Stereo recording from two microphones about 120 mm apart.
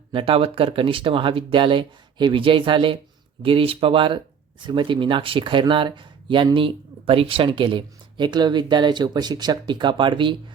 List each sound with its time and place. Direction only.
0.1 s speech: 50° right (ahead or behind)